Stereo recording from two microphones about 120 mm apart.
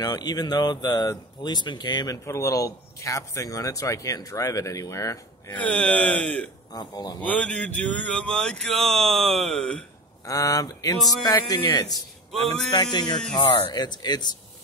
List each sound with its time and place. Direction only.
0.0 s speech: 35° left (ahead or behind)
5.6 s mantra: 10° left (ahead or behind)
6.7 s speech: 35° left (ahead or behind)
7.2 s mantra: 10° left (ahead or behind)
10.2 s speech: 30° left (ahead or behind)
12.3 s a sound: centre (ahead or behind)
12.7 s speech: 40° left (ahead or behind)